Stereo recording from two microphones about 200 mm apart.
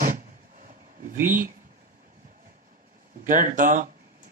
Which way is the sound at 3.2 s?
45° right (ahead or behind).